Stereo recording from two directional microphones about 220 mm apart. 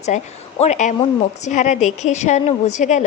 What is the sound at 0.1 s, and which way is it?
A woman's voice, 30° left (ahead or behind).